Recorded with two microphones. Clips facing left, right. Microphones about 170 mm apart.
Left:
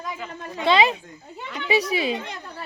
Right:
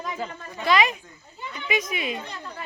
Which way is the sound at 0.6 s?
30° left (ahead or behind).